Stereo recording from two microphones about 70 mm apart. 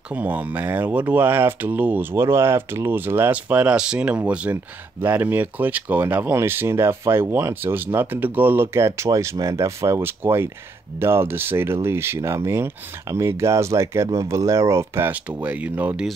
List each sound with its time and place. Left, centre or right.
0.1 s speech: right
2.1 s speech: right
8.7 s speech: right
10.0 s speech: right
15.0 s speech: right